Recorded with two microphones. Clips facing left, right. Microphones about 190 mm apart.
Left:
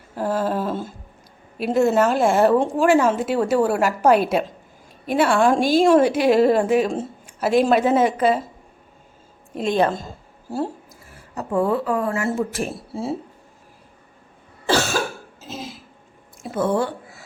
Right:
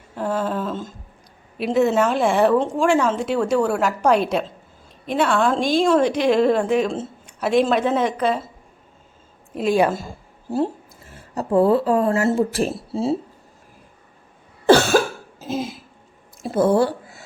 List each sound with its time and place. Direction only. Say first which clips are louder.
0.2 s a woman's voice: left 1 dB; 5° left (ahead or behind)
9.6 s a woman's voice: right 2 dB; 10° right (ahead or behind)
11.1 s speech: right 4 dB; 30° right (ahead or behind)
16.4 s a sound: right 4 dB; 35° right (ahead or behind)